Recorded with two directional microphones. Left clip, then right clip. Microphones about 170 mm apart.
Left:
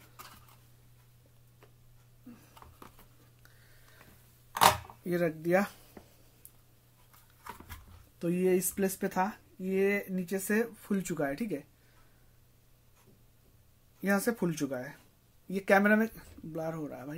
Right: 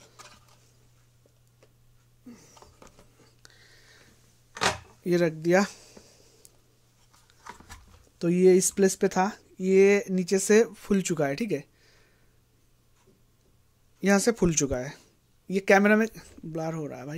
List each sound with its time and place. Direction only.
5.0 s speech: 50° right (ahead or behind)
8.2 s speech: 60° right (ahead or behind)
14.0 s speech: 55° right (ahead or behind)